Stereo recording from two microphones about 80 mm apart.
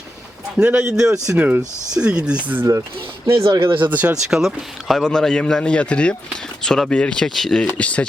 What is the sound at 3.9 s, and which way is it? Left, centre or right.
Speech, centre.